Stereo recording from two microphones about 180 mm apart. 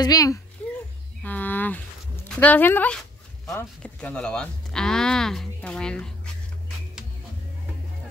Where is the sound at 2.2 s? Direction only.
10° left (ahead or behind).